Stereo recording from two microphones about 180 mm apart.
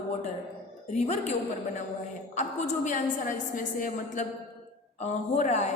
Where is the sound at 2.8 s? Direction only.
45° left (ahead or behind).